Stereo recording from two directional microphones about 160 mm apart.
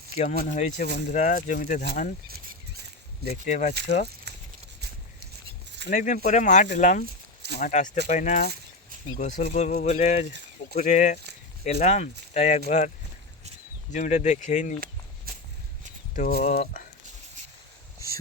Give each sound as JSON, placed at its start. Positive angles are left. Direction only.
{"t": 0.2, "sound": "speech", "side_deg": 45}
{"t": 3.4, "sound": "speech", "side_deg": 50}
{"t": 5.9, "sound": "speech", "side_deg": 50}
{"t": 13.9, "sound": "speech", "side_deg": 50}
{"t": 16.1, "sound": "speech", "side_deg": 55}